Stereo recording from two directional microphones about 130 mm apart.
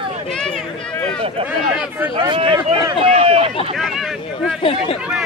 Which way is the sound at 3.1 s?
45° right (ahead or behind).